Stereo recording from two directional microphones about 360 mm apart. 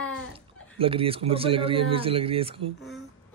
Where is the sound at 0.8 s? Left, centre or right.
Centre.